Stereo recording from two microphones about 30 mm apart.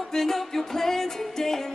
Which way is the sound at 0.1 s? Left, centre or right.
Centre.